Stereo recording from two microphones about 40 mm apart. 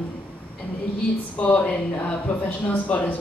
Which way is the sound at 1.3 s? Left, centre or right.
Left.